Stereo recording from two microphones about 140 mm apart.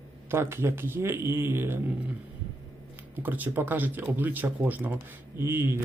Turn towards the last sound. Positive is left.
turn(degrees=-15)  # may be behind; listen again after turning